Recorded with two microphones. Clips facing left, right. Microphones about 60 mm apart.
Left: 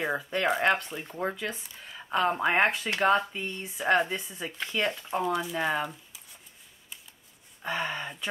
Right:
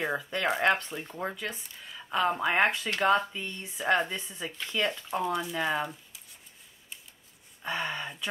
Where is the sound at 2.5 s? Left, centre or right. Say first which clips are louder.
Left 1 dB; left.